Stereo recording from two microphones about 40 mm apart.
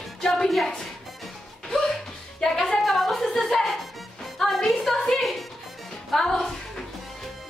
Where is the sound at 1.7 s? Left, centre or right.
Centre.